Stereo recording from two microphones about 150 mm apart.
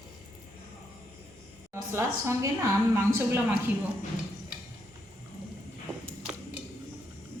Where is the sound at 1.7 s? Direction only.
15° right (ahead or behind).